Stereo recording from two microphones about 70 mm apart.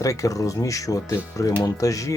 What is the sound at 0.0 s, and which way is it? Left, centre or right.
Speech, left.